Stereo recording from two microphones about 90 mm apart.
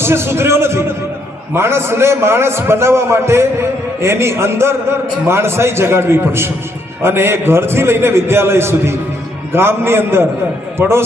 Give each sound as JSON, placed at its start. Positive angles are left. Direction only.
{"t": 0.0, "sound": "a man's voice", "side_deg": -30}